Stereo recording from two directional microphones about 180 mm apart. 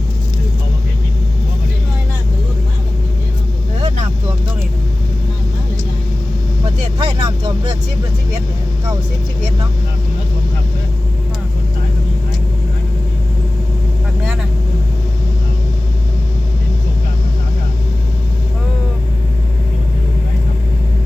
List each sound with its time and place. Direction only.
3.8 s vehicle: 35° right (ahead or behind)
7.0 s vehicle: 25° right (ahead or behind)